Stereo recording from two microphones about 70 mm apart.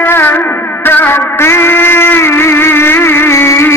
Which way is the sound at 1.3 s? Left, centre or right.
Left.